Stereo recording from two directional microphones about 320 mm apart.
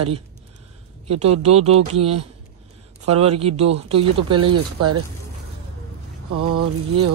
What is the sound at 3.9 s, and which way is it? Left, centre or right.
Speech, right.